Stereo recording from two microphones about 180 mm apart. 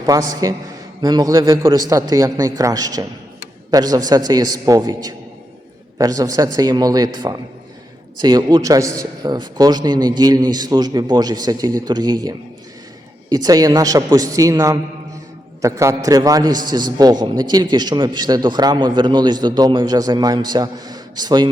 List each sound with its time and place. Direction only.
0.0 s a man's voice: 20° right (ahead or behind)